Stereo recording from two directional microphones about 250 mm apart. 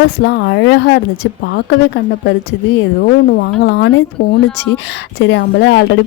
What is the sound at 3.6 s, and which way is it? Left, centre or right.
Speech, left.